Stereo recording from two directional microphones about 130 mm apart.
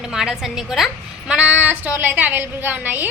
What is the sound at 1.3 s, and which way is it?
A woman's voice, 10° right (ahead or behind).